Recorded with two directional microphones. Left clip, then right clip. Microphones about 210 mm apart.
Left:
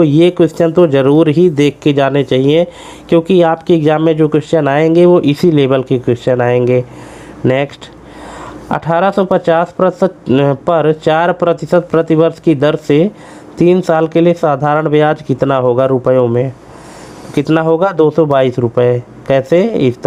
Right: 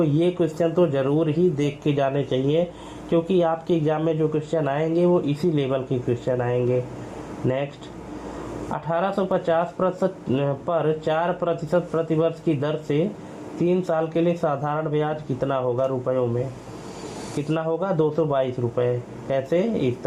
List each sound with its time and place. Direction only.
0.0 s speech: 35° left (ahead or behind)
8.7 s speech: 40° left (ahead or behind)
17.5 s speech: 40° left (ahead or behind)